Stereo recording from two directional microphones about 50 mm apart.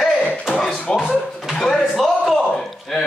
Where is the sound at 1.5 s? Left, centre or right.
Centre.